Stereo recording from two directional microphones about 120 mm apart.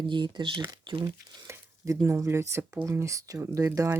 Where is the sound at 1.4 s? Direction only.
25° right (ahead or behind).